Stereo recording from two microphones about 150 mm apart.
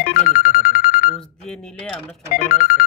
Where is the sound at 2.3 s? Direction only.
65° left (ahead or behind).